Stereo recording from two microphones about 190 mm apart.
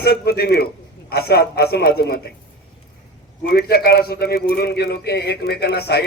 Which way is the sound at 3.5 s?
55° left (ahead or behind).